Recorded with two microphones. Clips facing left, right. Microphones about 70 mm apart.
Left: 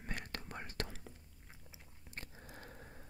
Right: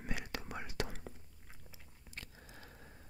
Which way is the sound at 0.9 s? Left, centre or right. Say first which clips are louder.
Right 3 dB; right.